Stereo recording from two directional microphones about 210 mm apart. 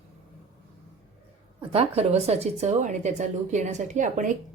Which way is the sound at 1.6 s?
30° right (ahead or behind).